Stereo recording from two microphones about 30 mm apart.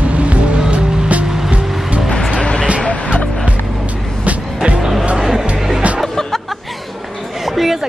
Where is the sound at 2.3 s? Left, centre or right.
Left.